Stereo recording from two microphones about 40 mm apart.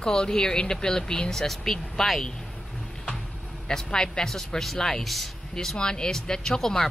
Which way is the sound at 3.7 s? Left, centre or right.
Centre.